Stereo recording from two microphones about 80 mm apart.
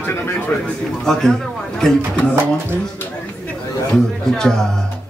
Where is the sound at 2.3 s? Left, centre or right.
Right.